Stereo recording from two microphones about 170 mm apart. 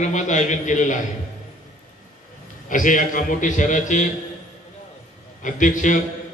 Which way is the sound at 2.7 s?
50° left (ahead or behind).